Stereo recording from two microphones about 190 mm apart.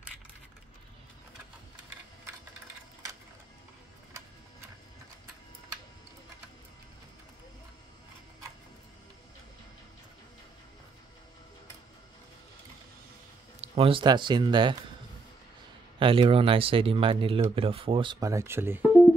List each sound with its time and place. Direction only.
13.6 s speech: 30° right (ahead or behind)
16.0 s speech: 30° right (ahead or behind); by 18.9 s 10° right (ahead or behind)